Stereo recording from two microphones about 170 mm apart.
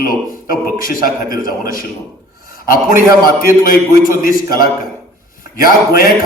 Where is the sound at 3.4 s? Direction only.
55° left (ahead or behind).